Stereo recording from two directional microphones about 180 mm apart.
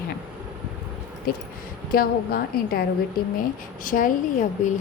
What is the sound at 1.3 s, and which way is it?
A woman's voice, 55° left (ahead or behind).